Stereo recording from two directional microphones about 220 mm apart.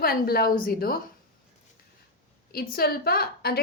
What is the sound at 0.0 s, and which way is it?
Speech, 45° left (ahead or behind).